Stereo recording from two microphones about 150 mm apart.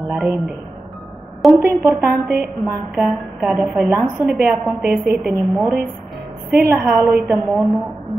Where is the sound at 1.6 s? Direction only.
15° right (ahead or behind).